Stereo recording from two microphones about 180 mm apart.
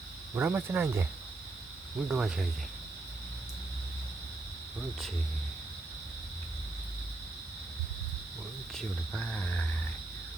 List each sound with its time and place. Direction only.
0.3 s cricket: 10° right (ahead or behind)
2.0 s cricket: 5° right (ahead or behind)
8.7 s speech: 5° left (ahead or behind)